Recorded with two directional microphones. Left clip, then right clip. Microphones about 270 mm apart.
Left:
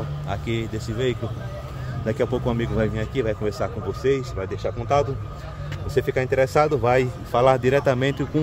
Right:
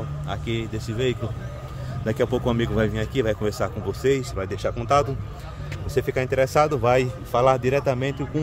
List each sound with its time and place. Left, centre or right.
0.3 s speech: centre
5.9 s speech: centre